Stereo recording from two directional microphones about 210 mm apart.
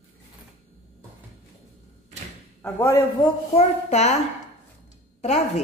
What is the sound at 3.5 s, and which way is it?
Speech, 30° left (ahead or behind).